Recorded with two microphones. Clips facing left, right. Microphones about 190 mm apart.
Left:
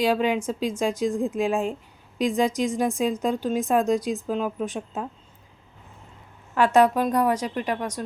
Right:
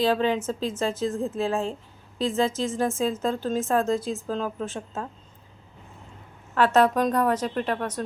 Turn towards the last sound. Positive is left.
turn(degrees=10)  # may be behind; listen again after turning